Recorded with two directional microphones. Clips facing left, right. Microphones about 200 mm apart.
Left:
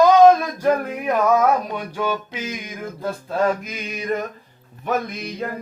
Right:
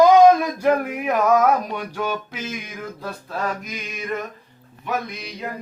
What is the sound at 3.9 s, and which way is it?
Music, 35° left (ahead or behind).